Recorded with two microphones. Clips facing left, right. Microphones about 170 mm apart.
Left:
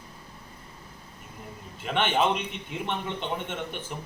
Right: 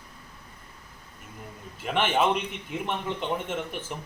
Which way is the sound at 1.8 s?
5° right (ahead or behind).